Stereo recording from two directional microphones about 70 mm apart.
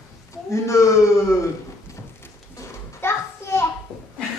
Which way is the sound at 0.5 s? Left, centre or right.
Left.